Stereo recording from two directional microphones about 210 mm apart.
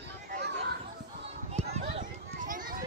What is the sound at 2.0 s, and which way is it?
Children playing, 40° right (ahead or behind).